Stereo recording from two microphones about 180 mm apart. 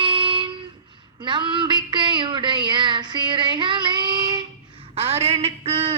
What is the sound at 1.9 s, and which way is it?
Female singing, 25° right (ahead or behind).